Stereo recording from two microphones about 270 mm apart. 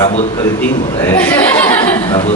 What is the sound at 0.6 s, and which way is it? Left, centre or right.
Speech, centre.